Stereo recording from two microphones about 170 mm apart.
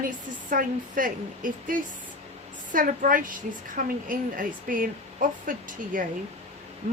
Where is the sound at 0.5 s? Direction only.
55° right (ahead or behind).